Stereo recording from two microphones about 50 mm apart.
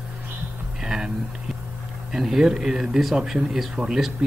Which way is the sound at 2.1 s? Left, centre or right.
Centre.